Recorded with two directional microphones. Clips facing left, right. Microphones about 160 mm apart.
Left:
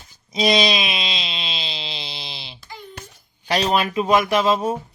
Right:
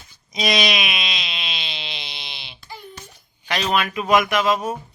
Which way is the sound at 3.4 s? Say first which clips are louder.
Left 2 dB; 35° left (ahead or behind).